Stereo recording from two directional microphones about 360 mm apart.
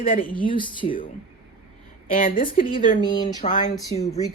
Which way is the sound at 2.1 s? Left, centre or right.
Left.